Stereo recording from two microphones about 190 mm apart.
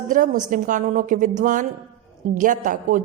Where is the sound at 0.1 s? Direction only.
45° right (ahead or behind).